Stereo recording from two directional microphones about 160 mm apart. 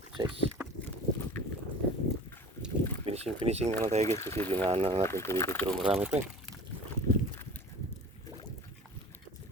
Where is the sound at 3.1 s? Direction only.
40° right (ahead or behind).